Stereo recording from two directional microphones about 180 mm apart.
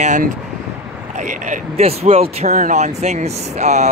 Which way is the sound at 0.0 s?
45° right (ahead or behind).